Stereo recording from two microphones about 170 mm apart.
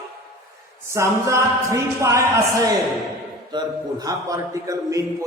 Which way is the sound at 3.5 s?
25° right (ahead or behind).